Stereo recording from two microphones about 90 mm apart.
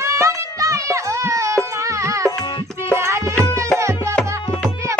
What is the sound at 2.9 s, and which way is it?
Music, 30° right (ahead or behind).